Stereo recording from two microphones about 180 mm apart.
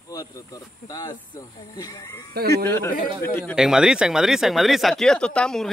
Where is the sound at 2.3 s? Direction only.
60° right (ahead or behind).